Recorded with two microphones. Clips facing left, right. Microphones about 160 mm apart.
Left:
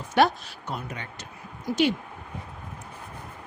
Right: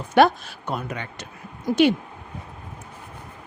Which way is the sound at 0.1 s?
55° right (ahead or behind).